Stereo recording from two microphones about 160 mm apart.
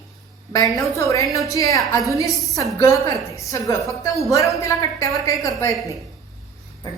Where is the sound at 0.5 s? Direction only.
20° left (ahead or behind).